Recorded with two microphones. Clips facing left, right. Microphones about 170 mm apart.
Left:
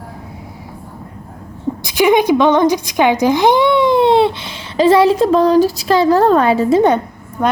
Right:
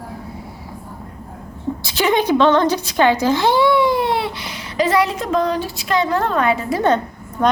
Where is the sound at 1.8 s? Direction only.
15° left (ahead or behind); by 6.8 s 30° left (ahead or behind).